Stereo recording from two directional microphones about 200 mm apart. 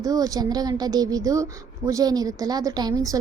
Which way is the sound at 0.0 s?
20° right (ahead or behind).